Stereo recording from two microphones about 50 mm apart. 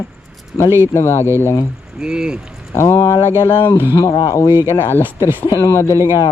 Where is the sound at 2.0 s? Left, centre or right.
Centre.